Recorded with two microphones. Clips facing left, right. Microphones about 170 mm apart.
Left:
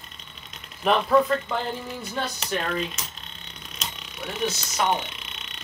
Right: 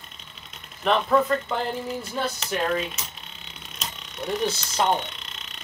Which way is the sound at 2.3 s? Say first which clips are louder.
Right 3 dB; centre (ahead or behind).